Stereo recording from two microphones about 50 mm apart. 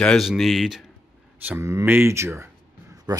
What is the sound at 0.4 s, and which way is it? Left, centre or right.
Speech, centre.